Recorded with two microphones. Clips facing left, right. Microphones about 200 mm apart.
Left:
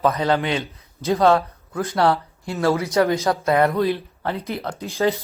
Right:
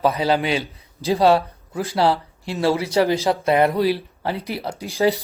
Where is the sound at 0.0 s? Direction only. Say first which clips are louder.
Right 1 dB; 10° right (ahead or behind).